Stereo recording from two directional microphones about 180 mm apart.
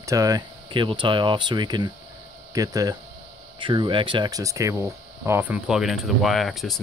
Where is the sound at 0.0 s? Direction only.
20° right (ahead or behind).